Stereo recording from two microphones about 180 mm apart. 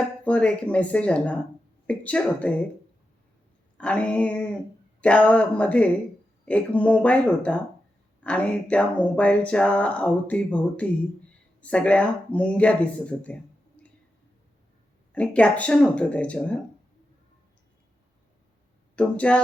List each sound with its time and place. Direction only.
0.3 s speech: 5° left (ahead or behind)
3.8 s speech: 5° left (ahead or behind)
15.1 s speech: 5° left (ahead or behind)
18.9 s speech: 5° left (ahead or behind)